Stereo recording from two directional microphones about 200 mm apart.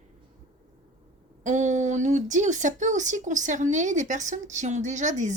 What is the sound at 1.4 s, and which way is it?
A woman's voice, 35° right (ahead or behind).